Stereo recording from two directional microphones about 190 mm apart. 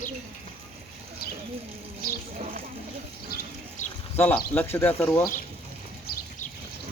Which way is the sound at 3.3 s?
50° left (ahead or behind).